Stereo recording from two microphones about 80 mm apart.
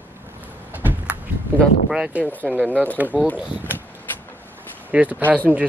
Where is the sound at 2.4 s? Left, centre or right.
Centre.